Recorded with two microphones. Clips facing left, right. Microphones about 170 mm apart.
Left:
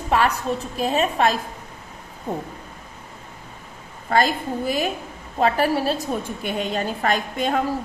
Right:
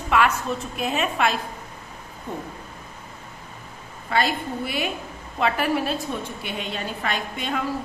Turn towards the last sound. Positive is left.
turn(degrees=45)  # may be behind; listen again after turning